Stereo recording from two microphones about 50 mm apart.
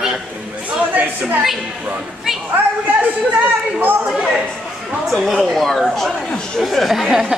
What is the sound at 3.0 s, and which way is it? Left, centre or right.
Speech, right.